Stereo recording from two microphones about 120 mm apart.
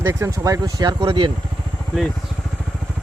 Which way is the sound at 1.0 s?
45° right (ahead or behind).